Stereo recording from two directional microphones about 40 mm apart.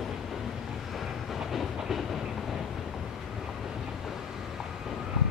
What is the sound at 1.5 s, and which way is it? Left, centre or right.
Train, centre.